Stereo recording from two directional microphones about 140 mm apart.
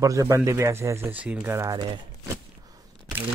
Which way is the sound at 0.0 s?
20° right (ahead or behind).